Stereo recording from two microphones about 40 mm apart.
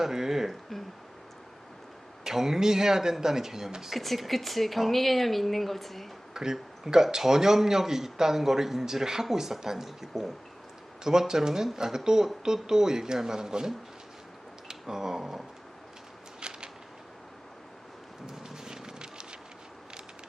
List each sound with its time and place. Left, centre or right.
0.0 s a man's voice: centre
2.2 s a man's voice: centre
3.9 s speech: centre
6.3 s a man's voice: centre
16.4 s a sound: right
18.3 s a sound: centre